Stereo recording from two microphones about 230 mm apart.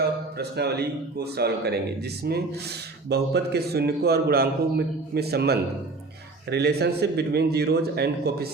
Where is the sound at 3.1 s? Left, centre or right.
Right.